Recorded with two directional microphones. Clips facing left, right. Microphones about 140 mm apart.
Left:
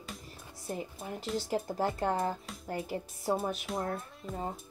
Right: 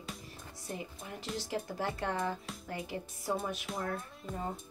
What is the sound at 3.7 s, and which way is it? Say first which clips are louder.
Speech: left 4 dB; centre (ahead or behind).